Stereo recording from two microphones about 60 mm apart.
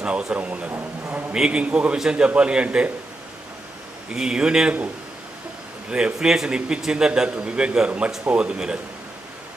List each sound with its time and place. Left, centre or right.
0.0 s speech: centre
0.7 s speech: right
1.4 s a man's voice: centre
4.1 s a man's voice: centre
5.9 s a man's voice: centre